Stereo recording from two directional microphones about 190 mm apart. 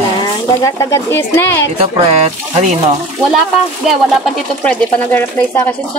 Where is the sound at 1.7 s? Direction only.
35° right (ahead or behind).